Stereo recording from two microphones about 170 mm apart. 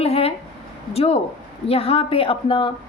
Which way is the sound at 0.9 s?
35° left (ahead or behind).